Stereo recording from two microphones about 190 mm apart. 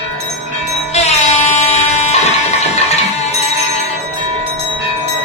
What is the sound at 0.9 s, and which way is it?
Music, 35° left (ahead or behind).